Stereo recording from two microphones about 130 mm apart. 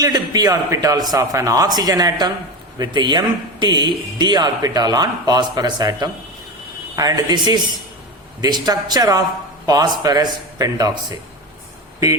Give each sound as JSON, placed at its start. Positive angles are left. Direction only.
{"t": 0.0, "sound": "a man's voice", "side_deg": -30}